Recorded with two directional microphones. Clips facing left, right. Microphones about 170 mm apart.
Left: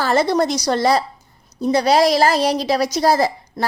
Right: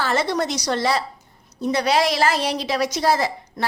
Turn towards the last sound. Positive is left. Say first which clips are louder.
# left 4 dB
turn(degrees=40)  # may be behind; listen again after turning